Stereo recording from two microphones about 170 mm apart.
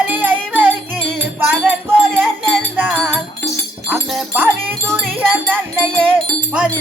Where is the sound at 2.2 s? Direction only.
Centre (ahead or behind).